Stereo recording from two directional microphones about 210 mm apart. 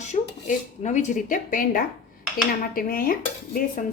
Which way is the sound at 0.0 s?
35° left (ahead or behind).